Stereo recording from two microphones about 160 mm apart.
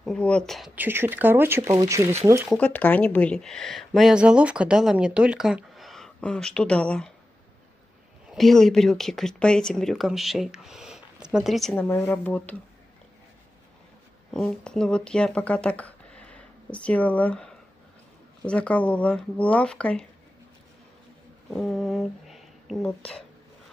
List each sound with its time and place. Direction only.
0.0 s a woman's voice: 5° left (ahead or behind)
0.7 s speech: 15° right (ahead or behind)
2.5 s a woman's voice: 10° left (ahead or behind)
8.3 s a woman's voice: centre (ahead or behind)
11.7 s speech: 10° left (ahead or behind)
14.3 s speech: 5° left (ahead or behind)
21.5 s speech: 5° left (ahead or behind)